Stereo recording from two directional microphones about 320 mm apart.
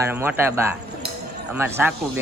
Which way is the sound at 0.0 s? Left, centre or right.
Centre.